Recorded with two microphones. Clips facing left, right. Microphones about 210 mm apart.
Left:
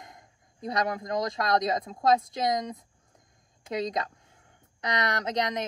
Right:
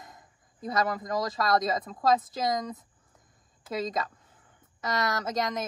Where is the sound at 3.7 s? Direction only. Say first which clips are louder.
Left 1 dB; 20° left (ahead or behind).